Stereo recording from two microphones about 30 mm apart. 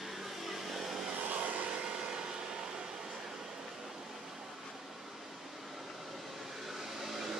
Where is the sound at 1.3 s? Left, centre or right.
Right.